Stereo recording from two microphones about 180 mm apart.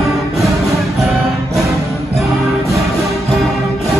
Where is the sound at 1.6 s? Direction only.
Centre (ahead or behind).